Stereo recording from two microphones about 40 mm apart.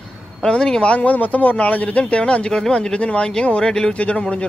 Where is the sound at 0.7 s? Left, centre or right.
Left.